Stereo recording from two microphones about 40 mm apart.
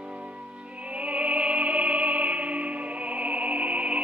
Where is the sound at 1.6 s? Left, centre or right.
Right.